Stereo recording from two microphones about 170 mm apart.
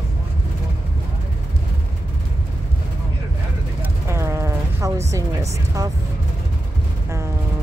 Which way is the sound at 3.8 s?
15° right (ahead or behind).